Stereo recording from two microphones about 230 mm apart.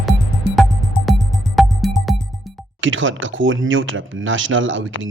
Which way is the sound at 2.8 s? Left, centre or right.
Right.